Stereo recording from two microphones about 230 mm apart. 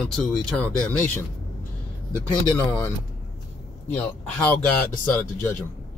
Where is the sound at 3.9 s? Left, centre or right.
Centre.